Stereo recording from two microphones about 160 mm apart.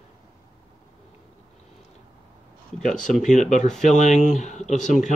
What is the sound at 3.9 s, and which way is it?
Speech, 50° left (ahead or behind).